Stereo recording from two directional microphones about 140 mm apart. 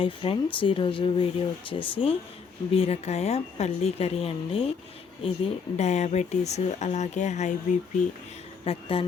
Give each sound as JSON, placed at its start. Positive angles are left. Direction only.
{"t": 0.0, "sound": "speech", "side_deg": 40}
{"t": 8.6, "sound": "speech", "side_deg": 40}